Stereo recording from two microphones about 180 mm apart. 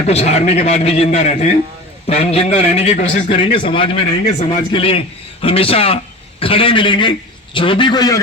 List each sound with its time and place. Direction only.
0.1 s a man's voice: 35° left (ahead or behind)
3.3 s a man's voice: 30° left (ahead or behind)